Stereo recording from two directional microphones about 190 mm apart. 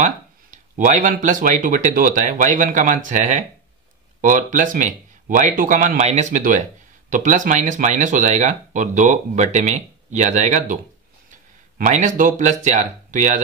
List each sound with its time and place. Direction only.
0.0 s speech: 40° right (ahead or behind)
11.8 s speech: 40° right (ahead or behind)